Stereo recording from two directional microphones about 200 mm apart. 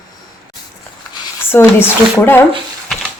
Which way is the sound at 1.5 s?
10° left (ahead or behind).